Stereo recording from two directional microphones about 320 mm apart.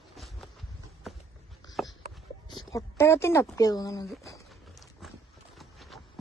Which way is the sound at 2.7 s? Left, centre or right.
Centre.